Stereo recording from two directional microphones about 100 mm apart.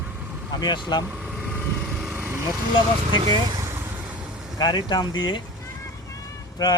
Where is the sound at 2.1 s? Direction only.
25° right (ahead or behind).